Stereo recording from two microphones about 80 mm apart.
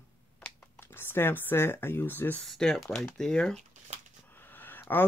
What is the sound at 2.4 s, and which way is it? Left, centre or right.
Speech, centre.